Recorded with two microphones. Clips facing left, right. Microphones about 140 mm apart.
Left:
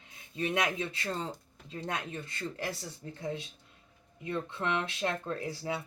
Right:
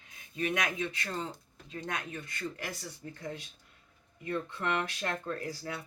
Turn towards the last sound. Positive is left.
turn(degrees=25)  # may be behind; listen again after turning